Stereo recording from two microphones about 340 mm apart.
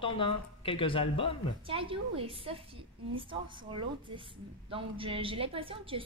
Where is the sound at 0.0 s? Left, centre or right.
Centre.